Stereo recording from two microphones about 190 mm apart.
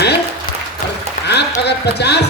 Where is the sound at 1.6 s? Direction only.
60° left (ahead or behind).